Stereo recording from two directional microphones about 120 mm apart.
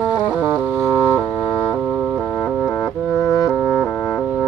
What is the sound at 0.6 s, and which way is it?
Organ, 10° left (ahead or behind).